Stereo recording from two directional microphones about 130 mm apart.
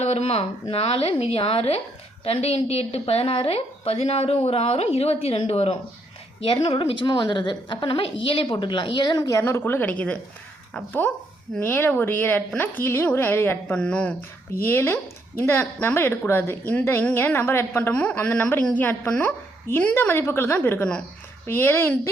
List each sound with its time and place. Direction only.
0.0 s a woman's voice: 55° left (ahead or behind); by 22.1 s 20° left (ahead or behind)